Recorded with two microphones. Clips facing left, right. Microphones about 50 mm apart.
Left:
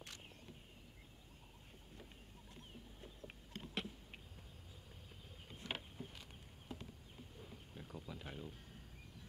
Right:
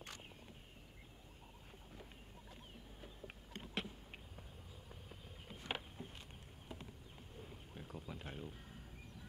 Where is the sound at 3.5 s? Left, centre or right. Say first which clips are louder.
Right 1 dB; centre.